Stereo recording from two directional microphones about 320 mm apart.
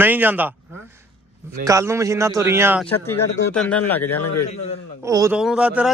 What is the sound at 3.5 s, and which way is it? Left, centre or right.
Speech, centre.